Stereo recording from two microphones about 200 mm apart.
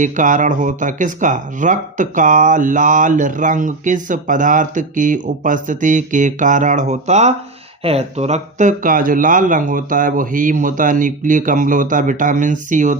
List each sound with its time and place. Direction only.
0.0 s speech: 40° right (ahead or behind)